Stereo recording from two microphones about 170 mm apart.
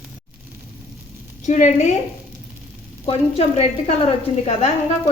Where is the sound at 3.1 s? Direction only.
35° left (ahead or behind).